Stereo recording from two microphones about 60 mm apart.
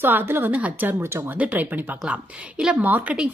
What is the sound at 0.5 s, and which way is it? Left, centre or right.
Speech, right.